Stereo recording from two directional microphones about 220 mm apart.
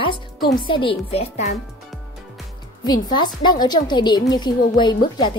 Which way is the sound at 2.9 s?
20° left (ahead or behind).